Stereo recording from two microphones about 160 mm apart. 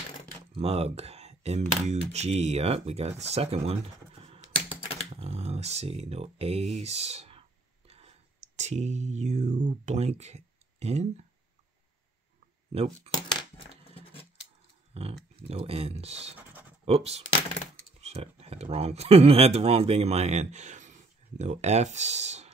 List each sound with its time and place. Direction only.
0.6 s speech: 40° right (ahead or behind)
12.7 s speech: 40° right (ahead or behind)
14.9 s speech: 40° right (ahead or behind)